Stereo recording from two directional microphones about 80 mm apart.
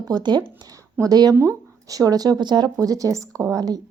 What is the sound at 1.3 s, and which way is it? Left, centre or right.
Speech, right.